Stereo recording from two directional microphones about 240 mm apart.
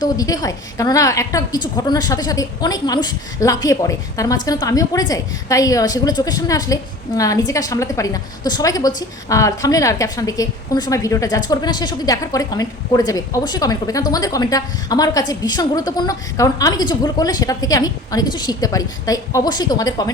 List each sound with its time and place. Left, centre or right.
0.0 s a woman's voice: centre